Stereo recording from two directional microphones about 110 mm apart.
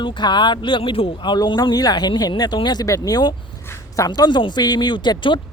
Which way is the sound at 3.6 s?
30° left (ahead or behind).